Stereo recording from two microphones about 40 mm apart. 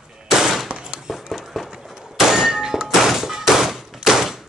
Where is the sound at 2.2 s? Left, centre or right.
Centre.